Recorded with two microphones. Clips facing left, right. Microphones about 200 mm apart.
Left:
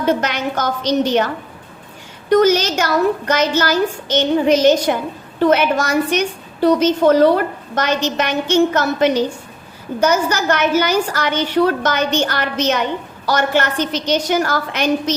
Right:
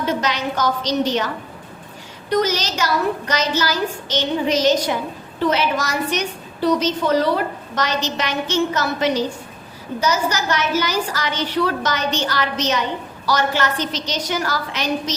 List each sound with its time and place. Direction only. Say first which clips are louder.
0.0 s a woman's voice: left 4 dB; 55° left (ahead or behind)
2.3 s a woman's voice: left 7 dB; 50° left (ahead or behind)